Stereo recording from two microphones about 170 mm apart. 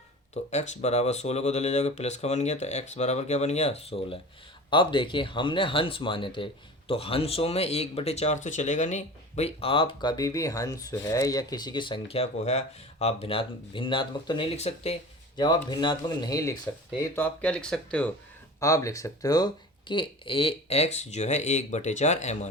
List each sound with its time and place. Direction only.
0.5 s speech: 40° left (ahead or behind)
15.4 s speech: 25° left (ahead or behind)
17.2 s speech: 10° left (ahead or behind)
18.6 s speech: 20° left (ahead or behind); by 22.4 s 45° left (ahead or behind)